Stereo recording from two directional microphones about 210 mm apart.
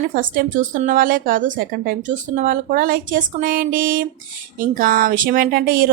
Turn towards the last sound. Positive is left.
turn(degrees=-45)  # may be behind; listen again after turning